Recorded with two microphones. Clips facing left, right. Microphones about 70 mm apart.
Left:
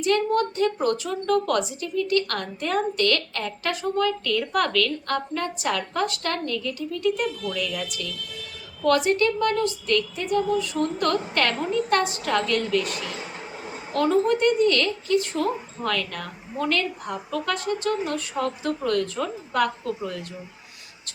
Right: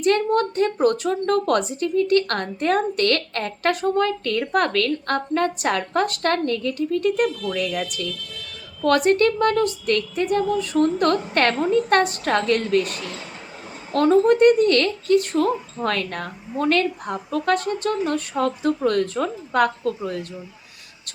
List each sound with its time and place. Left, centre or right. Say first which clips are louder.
0.0 s a woman's voice: right 3 dB; right